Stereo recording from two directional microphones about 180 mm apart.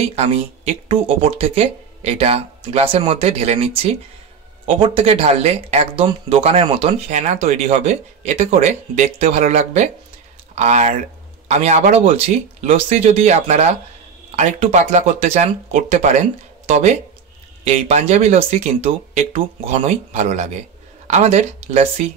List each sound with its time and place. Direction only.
0.1 s speech: 35° right (ahead or behind)